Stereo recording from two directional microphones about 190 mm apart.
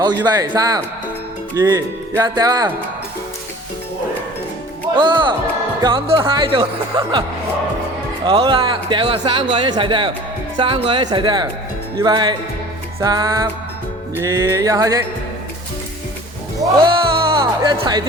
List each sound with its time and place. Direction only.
0.0 s speech: 20° right (ahead or behind)
4.9 s speech: 25° right (ahead or behind)
14.2 s music: 15° right (ahead or behind)
16.8 s music: 25° right (ahead or behind)